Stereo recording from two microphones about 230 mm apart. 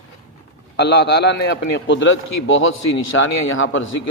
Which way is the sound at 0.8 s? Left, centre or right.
Left.